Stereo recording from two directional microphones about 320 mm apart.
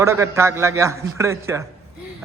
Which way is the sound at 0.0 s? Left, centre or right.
Centre.